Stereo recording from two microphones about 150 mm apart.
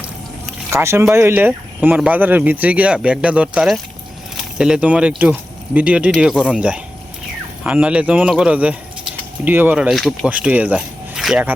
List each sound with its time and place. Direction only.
0.7 s speech: 20° right (ahead or behind)
9.9 s speech: centre (ahead or behind)